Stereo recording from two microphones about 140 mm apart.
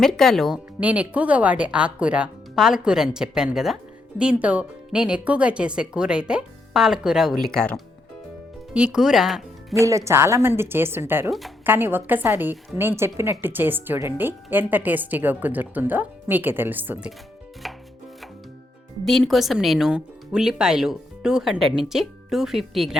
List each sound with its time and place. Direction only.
0.0 s speech: 5° left (ahead or behind)
0.8 s a woman's voice: 10° right (ahead or behind)
7.4 s speech: 5° left (ahead or behind)
8.7 s speech: 5° right (ahead or behind)
9.7 s a woman's voice: 20° right (ahead or behind)
11.3 s speech: centre (ahead or behind)
11.6 s a woman's voice: 15° right (ahead or behind)
17.6 s chopping: centre (ahead or behind)
19.0 s speech: centre (ahead or behind)